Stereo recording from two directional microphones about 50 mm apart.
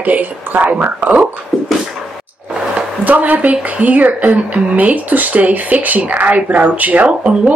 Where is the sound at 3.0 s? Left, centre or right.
Right.